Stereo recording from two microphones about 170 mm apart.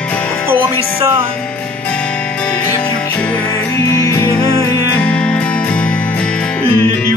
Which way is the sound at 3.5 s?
20° left (ahead or behind).